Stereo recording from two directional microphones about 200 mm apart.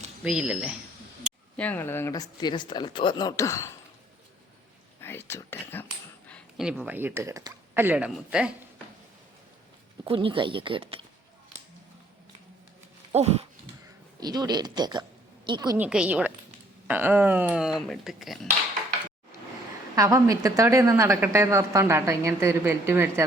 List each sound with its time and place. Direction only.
0.3 s speech: 5° right (ahead or behind)
1.5 s speech: 10° left (ahead or behind)
4.9 s speech: 10° left (ahead or behind)
6.2 s a sound: 5° left (ahead or behind)
6.7 s speech: 5° right (ahead or behind)
10.0 s speech: 25° right (ahead or behind)
13.1 s dog: 30° right (ahead or behind)
14.2 s speech: 20° right (ahead or behind)
15.8 s speech: 5° right (ahead or behind)
20.0 s speech: 15° right (ahead or behind)